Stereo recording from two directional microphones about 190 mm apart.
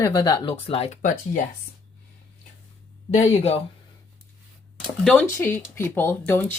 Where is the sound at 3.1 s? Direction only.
35° left (ahead or behind).